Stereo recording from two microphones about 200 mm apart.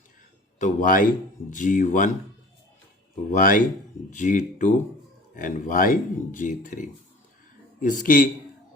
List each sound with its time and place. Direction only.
0.6 s speech: 45° left (ahead or behind)
3.3 s speech: 45° left (ahead or behind)